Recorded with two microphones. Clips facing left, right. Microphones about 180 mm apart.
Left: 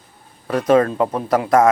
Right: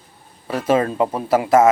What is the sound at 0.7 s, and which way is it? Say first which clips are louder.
Speech: left 2 dB; 5° right (ahead or behind).